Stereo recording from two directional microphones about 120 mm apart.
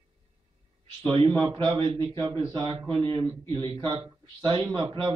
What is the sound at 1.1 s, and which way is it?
A man's voice, 45° right (ahead or behind).